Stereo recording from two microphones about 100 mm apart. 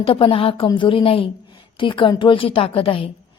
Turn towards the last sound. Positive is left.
turn(degrees=65)  # may be behind; listen again after turning